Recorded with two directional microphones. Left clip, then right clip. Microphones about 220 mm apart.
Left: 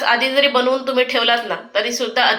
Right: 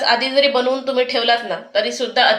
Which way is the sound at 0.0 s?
40° right (ahead or behind).